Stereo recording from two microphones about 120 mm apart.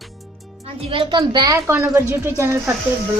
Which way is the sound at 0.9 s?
40° right (ahead or behind).